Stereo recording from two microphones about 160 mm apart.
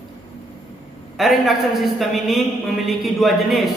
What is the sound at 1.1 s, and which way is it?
A man's voice, centre (ahead or behind).